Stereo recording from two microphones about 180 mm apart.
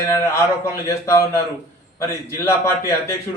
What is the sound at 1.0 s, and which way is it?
A man's voice, 15° left (ahead or behind).